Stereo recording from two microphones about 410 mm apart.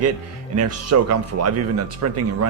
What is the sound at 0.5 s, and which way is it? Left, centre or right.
Speech, right.